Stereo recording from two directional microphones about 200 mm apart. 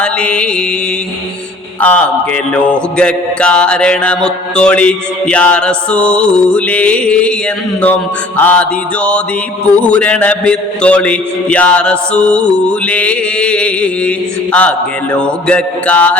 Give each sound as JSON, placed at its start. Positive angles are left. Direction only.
{"t": 0.0, "sound": "mantra", "side_deg": 5}
{"t": 1.8, "sound": "mantra", "side_deg": 5}
{"t": 8.4, "sound": "a man's voice", "side_deg": 10}